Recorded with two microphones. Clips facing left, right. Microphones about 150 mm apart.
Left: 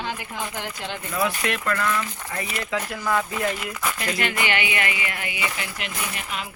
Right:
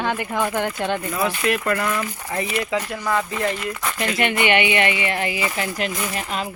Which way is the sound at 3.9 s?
25° right (ahead or behind).